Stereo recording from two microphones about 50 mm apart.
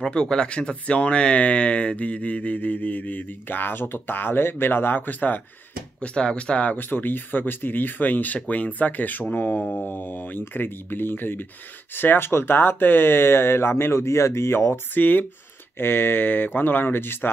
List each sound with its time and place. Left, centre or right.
0.1 s speech: centre; by 5.4 s left
5.9 s speech: left
15.0 s speech: left